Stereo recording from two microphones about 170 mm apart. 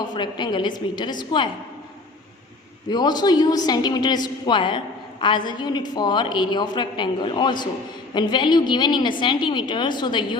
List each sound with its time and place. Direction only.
0.1 s a woman's voice: 25° left (ahead or behind)
2.9 s a woman's voice: 25° left (ahead or behind)